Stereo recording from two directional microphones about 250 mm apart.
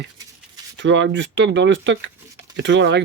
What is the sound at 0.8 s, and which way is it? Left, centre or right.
Speech, right.